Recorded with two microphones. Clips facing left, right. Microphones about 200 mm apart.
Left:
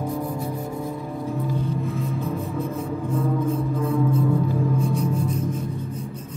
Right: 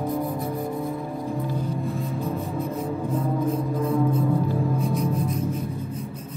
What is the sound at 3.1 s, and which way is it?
Music, 30° right (ahead or behind).